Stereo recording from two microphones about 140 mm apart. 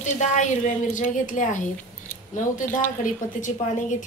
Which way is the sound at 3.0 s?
65° left (ahead or behind).